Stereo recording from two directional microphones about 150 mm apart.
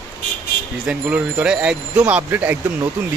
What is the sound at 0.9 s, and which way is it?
Speech, 10° right (ahead or behind).